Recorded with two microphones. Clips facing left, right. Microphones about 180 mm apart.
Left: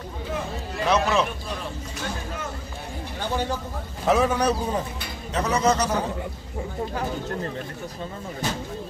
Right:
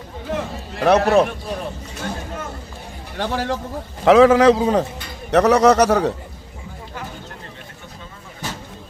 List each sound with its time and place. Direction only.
0.3 s run: 65° right (ahead or behind)
3.2 s a man's voice: 90° right